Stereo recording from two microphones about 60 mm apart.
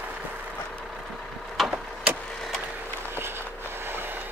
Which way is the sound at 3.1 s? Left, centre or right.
Right.